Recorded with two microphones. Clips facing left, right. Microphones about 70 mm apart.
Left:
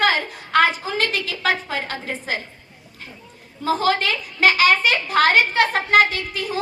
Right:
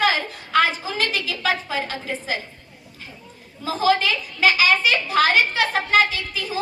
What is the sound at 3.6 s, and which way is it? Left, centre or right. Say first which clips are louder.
A woman's voice: even; left.